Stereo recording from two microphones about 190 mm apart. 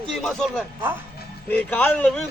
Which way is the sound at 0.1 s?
Centre (ahead or behind).